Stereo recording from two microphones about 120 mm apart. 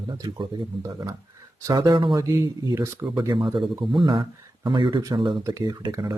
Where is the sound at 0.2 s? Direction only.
35° right (ahead or behind).